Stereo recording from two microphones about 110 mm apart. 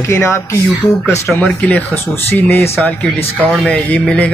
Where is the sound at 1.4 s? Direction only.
10° left (ahead or behind).